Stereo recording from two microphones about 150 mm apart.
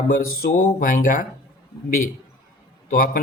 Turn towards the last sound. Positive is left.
turn(degrees=65)  # may be behind; listen again after turning